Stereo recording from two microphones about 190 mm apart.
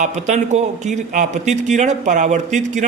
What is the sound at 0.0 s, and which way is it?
A man's voice, 40° right (ahead or behind).